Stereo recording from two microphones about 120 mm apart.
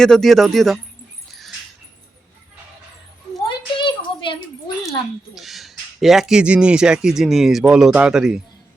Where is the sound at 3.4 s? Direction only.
45° left (ahead or behind).